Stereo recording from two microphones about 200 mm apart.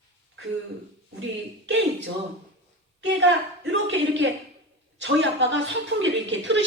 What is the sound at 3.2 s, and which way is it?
Speech, 65° right (ahead or behind).